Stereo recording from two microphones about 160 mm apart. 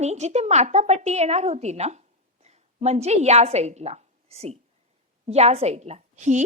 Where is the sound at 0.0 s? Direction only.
45° right (ahead or behind).